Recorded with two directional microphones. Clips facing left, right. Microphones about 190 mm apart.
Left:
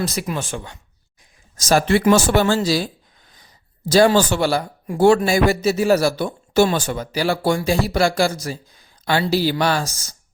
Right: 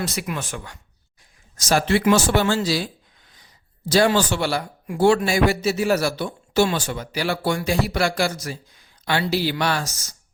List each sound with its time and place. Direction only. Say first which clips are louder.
0.2 s speech: left 3 dB; 30° left (ahead or behind)
1.6 s speech: left 3 dB; 45° left (ahead or behind)